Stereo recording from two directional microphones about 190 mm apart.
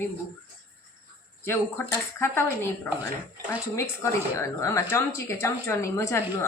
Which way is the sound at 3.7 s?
15° left (ahead or behind).